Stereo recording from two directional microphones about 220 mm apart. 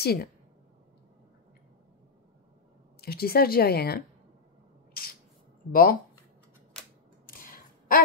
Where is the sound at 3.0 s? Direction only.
45° left (ahead or behind).